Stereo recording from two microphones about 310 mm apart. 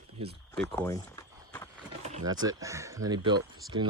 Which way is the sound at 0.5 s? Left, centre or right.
Centre.